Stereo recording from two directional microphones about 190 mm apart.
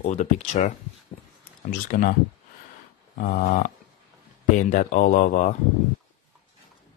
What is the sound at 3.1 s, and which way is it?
Speech, 45° left (ahead or behind).